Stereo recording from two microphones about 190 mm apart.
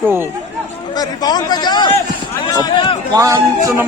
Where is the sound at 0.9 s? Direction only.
20° left (ahead or behind).